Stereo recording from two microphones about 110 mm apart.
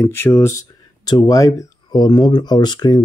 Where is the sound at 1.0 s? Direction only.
40° left (ahead or behind).